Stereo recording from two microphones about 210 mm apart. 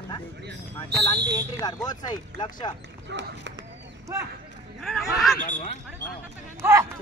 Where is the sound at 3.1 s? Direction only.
55° right (ahead or behind).